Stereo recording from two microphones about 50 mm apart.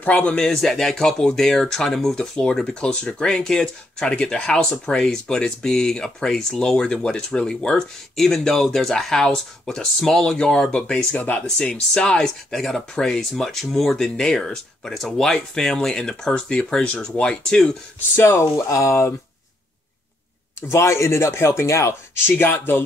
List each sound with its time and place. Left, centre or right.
0.0 s speech: left
0.4 s speech: centre
11.1 s speech: left; by 17.6 s centre
18.1 s speech: left
18.4 s speech: left
20.7 s speech: left
22.2 s speech: left